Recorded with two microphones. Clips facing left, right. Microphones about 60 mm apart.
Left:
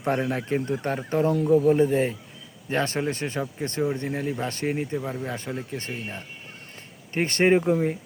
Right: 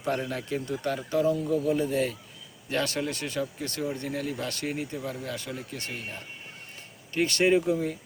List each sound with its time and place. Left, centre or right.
0.0 s speech: left